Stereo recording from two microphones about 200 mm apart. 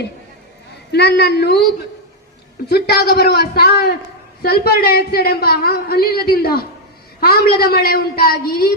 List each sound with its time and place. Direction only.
0.9 s speech: 55° left (ahead or behind)
2.6 s speech: 55° left (ahead or behind)